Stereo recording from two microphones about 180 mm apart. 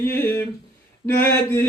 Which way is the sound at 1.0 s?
10° left (ahead or behind).